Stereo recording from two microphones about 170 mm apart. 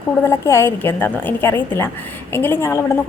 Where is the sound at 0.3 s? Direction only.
15° left (ahead or behind).